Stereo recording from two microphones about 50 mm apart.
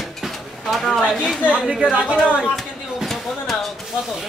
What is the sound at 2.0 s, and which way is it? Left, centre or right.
Speech, right.